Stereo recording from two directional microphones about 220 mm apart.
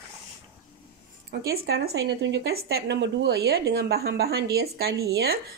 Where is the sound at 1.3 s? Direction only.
45° right (ahead or behind).